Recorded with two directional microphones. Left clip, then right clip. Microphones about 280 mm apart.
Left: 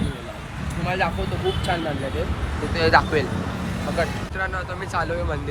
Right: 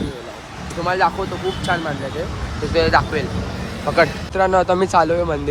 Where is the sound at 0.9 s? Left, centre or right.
Centre.